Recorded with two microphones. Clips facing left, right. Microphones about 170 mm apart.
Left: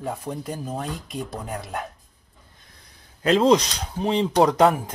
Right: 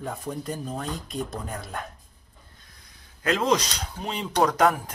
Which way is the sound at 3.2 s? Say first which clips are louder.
Left 6 dB; 25° left (ahead or behind).